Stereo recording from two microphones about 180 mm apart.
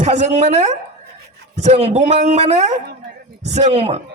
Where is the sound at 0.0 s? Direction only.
40° right (ahead or behind).